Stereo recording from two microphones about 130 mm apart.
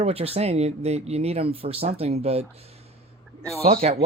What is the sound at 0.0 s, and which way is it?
Speech, 50° right (ahead or behind).